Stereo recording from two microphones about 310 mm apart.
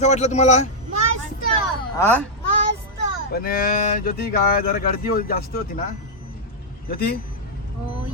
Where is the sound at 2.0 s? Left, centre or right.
Centre.